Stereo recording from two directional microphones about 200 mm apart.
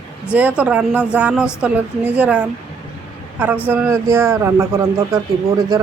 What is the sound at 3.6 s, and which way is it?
A man's voice, 10° right (ahead or behind).